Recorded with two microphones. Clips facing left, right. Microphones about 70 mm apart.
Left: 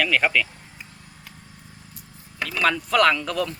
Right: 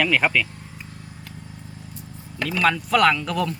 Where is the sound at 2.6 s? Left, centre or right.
Centre.